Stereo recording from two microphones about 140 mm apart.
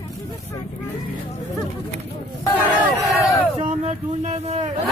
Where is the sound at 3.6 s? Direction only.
55° right (ahead or behind).